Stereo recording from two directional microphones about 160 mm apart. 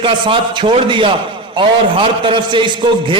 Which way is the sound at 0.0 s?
30° right (ahead or behind).